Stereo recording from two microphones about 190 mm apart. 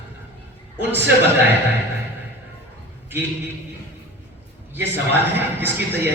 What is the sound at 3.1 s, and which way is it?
Speech, 10° right (ahead or behind).